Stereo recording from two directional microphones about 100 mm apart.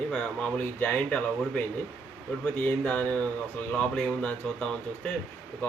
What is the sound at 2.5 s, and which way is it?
Speech, 15° left (ahead or behind).